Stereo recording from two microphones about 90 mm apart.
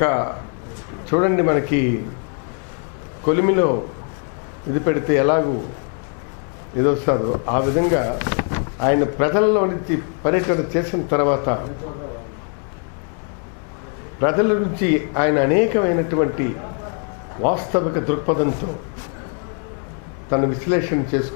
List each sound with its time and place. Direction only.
0.0 s speech: 20° left (ahead or behind)
3.3 s speech: 15° left (ahead or behind)
4.8 s speech: 20° left (ahead or behind)
6.8 s speech: 20° left (ahead or behind)
14.2 s speech: 20° left (ahead or behind)
20.2 s speech: 20° left (ahead or behind)